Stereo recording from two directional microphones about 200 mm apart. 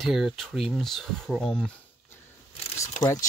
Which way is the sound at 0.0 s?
Centre (ahead or behind).